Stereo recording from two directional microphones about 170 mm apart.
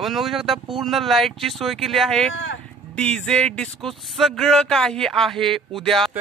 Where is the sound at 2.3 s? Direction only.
90° left.